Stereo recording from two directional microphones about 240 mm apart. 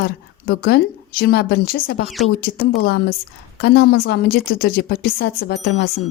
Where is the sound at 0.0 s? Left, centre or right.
Left.